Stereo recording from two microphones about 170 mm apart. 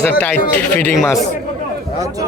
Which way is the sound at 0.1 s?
10° left (ahead or behind).